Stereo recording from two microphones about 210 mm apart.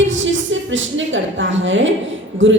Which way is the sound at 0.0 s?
65° right (ahead or behind).